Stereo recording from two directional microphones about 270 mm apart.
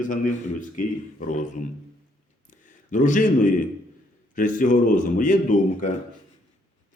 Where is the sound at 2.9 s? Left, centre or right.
Left.